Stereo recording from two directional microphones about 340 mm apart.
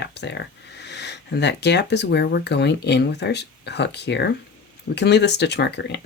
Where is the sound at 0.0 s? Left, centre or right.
Left.